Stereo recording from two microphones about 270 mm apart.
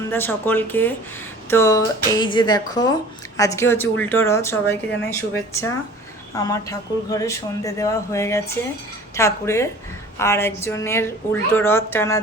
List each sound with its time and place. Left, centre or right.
0.1 s speech: centre